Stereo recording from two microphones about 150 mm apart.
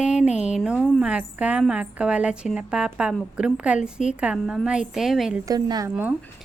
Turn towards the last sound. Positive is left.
turn(degrees=-25)  # may be behind; listen again after turning